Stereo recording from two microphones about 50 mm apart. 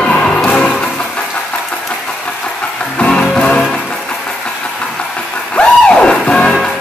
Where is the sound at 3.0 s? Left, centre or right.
Centre.